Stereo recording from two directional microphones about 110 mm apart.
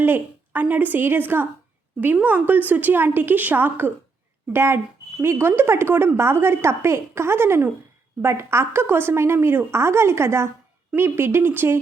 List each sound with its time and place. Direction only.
0.0 s a woman's voice: 15° right (ahead or behind)